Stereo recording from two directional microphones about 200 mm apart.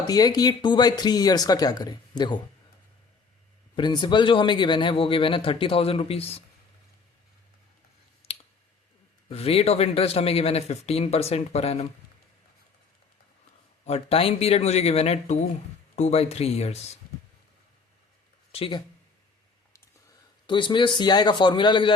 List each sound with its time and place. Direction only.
0.1 s speech: 20° left (ahead or behind)
3.8 s speech: 20° left (ahead or behind)
8.2 s clicking: 30° left (ahead or behind)
9.3 s speech: 30° left (ahead or behind)
13.8 s speech: 30° left (ahead or behind)
18.5 s speech: 30° left (ahead or behind)
20.5 s speech: 25° left (ahead or behind)